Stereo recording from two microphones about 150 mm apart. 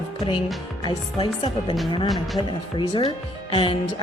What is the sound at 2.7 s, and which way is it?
Speech, 30° left (ahead or behind).